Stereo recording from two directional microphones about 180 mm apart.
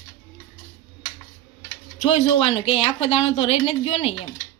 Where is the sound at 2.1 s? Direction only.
35° left (ahead or behind).